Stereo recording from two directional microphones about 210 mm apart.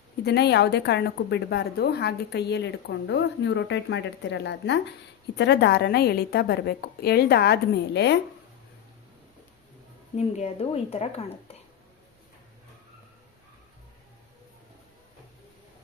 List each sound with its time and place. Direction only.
0.3 s a woman's voice: 55° left (ahead or behind)
10.2 s a woman's voice: 30° left (ahead or behind)